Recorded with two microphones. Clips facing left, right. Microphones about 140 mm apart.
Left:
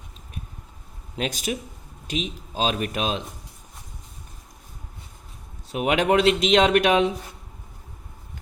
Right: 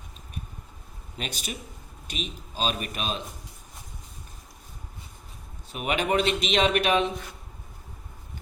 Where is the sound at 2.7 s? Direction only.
90° left.